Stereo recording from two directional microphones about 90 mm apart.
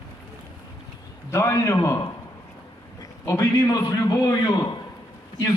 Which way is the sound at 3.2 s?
35° left (ahead or behind).